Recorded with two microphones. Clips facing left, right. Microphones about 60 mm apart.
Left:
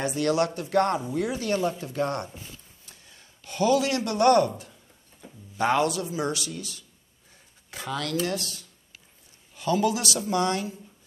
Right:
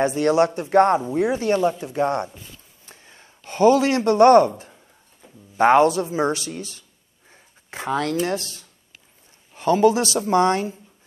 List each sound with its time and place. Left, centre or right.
0.0 s speech: right
2.8 s a sound: right
5.6 s speech: right